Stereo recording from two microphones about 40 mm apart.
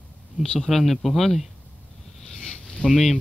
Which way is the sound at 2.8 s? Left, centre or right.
Left.